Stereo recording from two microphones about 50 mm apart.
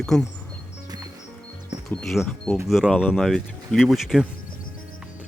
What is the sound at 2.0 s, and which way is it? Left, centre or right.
Speech, centre.